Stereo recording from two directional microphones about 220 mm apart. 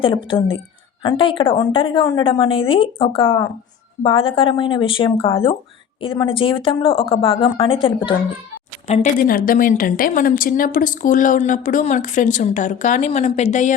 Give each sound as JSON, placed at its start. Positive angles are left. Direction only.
{"t": 0.0, "sound": "a woman's voice", "side_deg": 25}
{"t": 8.9, "sound": "speech", "side_deg": 35}